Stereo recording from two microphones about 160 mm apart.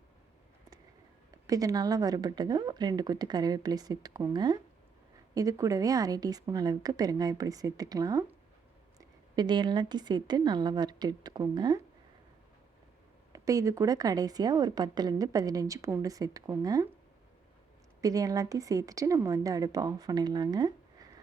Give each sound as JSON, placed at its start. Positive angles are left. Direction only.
{"t": 1.5, "sound": "a woman's voice", "side_deg": -20}
{"t": 13.3, "sound": "a woman's voice", "side_deg": -20}
{"t": 18.0, "sound": "a woman's voice", "side_deg": -20}